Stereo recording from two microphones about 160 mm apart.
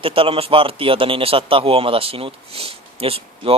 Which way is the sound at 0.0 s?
35° right (ahead or behind).